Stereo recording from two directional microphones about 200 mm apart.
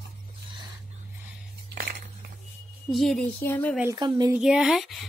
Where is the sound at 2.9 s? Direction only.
Centre (ahead or behind).